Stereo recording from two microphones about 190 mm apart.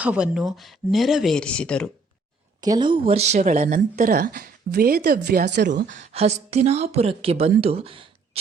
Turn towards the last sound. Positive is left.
turn(degrees=-30)  # may be behind; listen again after turning